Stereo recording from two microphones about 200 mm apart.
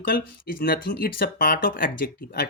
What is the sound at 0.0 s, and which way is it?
Speech, 45° left (ahead or behind).